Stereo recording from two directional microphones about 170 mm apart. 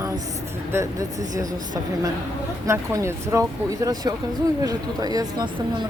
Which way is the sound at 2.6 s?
15° right (ahead or behind).